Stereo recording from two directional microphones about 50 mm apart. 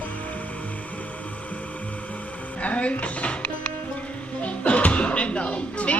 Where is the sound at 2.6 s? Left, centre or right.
Left.